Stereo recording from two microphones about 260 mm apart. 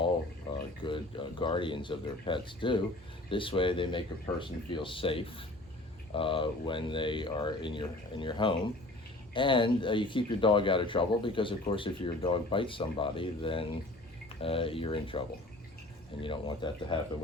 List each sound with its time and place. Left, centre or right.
0.9 s speech: centre
16.2 s speech: centre